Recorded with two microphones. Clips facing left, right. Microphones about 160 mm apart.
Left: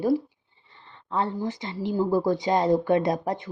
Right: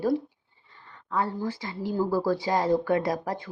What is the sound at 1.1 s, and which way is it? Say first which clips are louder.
Speech: left 1 dB; 25° left (ahead or behind).